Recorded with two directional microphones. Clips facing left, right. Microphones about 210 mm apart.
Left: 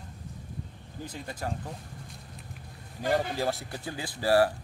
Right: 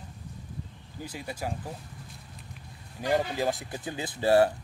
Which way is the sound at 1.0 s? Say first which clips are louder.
Right 1 dB; 10° right (ahead or behind).